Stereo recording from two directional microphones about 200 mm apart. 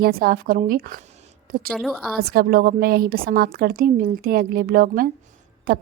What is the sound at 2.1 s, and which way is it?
A woman's voice, 50° right (ahead or behind).